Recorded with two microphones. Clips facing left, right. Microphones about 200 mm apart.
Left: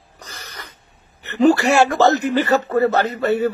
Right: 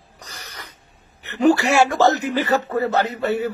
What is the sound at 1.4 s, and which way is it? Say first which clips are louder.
Speech: left 2 dB; centre (ahead or behind).